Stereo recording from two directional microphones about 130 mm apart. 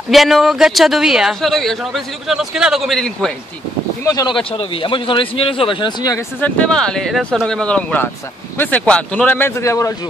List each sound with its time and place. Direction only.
0.1 s a man's voice: centre (ahead or behind)
4.0 s speech: 25° left (ahead or behind)
4.4 s speech: 45° left (ahead or behind)
6.4 s a man's voice: 5° left (ahead or behind); by 9.9 s 25° left (ahead or behind)